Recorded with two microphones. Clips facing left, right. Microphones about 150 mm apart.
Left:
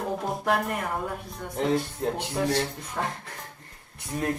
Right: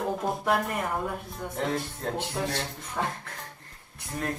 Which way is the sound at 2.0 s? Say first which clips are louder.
Left 3 dB; 15° left (ahead or behind).